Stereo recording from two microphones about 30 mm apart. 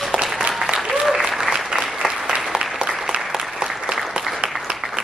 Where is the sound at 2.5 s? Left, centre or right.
Right.